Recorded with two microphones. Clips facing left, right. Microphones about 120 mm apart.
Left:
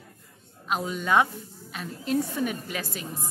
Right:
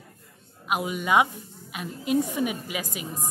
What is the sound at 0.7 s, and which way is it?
A woman's voice, 10° right (ahead or behind).